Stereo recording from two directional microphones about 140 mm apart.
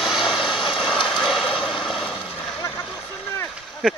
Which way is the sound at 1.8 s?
Centre (ahead or behind).